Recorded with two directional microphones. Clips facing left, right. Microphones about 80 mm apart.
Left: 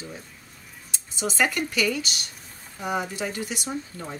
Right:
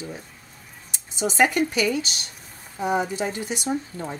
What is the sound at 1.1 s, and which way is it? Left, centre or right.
Speech, right.